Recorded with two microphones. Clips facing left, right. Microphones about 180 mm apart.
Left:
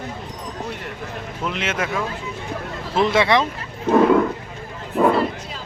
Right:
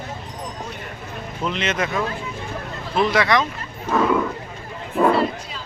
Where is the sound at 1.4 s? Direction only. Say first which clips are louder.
Right 1 dB; 5° left (ahead or behind).